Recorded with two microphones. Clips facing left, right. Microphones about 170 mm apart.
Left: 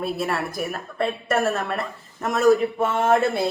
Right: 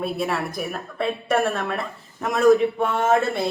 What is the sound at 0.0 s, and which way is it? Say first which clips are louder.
A woman's voice: even; centre (ahead or behind).